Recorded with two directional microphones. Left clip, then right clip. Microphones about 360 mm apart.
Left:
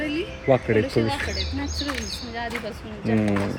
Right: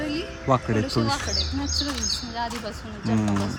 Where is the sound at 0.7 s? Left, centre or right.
Centre.